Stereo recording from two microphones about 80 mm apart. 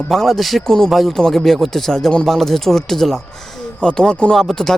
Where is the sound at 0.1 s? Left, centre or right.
Centre.